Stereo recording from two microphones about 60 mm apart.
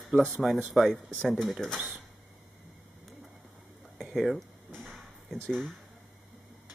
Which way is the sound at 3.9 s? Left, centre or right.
Centre.